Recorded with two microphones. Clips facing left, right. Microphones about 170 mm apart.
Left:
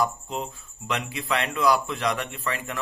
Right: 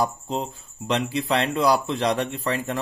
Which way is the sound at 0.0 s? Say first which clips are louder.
Right 2 dB; 35° right (ahead or behind).